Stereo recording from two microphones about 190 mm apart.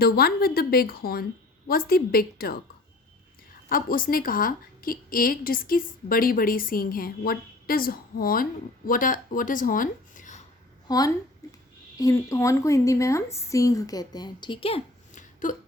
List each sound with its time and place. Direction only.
0.0 s a woman's voice: 55° left (ahead or behind)
3.7 s a woman's voice: 50° left (ahead or behind)
10.8 s a woman's voice: 20° left (ahead or behind)
11.4 s a sound: 20° left (ahead or behind)
11.9 s a woman's voice: 15° left (ahead or behind); by 15.5 s 45° left (ahead or behind)